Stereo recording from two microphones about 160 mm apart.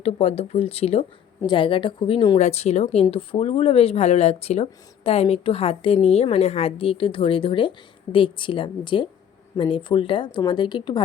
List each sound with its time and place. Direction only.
0.0 s speech: 40° left (ahead or behind)
2.4 s speech: 40° left (ahead or behind)